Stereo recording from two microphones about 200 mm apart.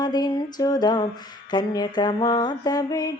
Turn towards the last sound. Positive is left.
turn(degrees=20)  # may be behind; listen again after turning